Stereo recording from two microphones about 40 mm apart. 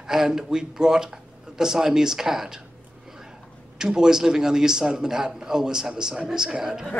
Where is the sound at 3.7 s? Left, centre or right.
Centre.